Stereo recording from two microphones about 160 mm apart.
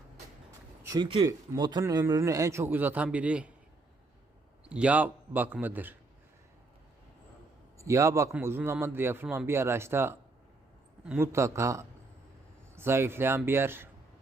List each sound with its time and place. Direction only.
0.9 s a man's voice: 30° right (ahead or behind); by 3.5 s 10° right (ahead or behind)
4.6 s a man's voice: 5° right (ahead or behind)
7.8 s a man's voice: 20° right (ahead or behind)